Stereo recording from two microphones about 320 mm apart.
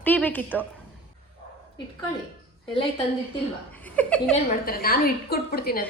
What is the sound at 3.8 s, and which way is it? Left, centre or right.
Speech, centre.